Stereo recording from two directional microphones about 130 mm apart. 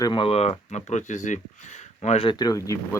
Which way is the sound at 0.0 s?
40° left (ahead or behind).